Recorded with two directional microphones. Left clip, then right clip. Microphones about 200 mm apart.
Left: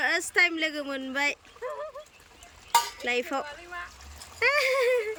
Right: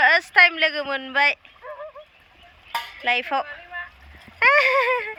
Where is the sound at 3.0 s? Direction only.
10° left (ahead or behind).